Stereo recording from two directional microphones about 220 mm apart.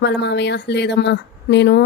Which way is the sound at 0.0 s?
50° left (ahead or behind).